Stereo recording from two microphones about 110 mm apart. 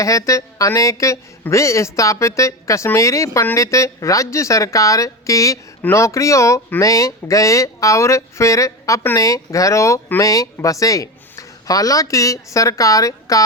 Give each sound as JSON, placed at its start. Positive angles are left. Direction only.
{"t": 0.0, "sound": "speech", "side_deg": 30}